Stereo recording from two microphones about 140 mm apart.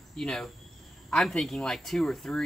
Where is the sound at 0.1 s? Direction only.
5° left (ahead or behind).